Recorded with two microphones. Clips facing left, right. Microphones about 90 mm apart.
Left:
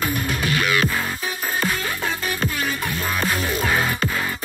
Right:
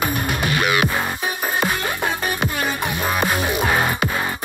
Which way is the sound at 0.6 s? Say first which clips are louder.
Right 2 dB; 20° right (ahead or behind).